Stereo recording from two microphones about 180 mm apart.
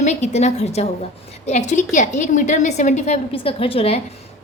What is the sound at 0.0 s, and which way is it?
A woman's voice, 40° left (ahead or behind).